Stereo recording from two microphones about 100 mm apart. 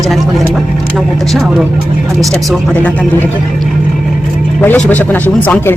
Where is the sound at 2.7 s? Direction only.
15° left (ahead or behind).